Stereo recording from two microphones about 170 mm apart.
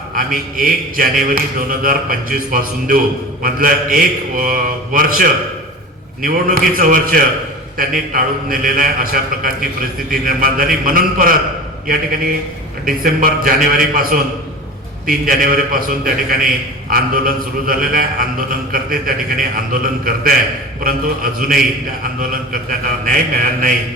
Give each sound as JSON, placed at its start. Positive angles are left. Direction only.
{"t": 0.2, "sound": "a man's voice", "side_deg": -55}
{"t": 23.0, "sound": "a man's voice", "side_deg": -55}